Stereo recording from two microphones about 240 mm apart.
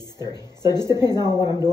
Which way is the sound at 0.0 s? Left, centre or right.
Centre.